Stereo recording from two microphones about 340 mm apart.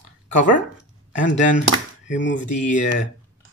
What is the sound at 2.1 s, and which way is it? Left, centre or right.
Speech, left.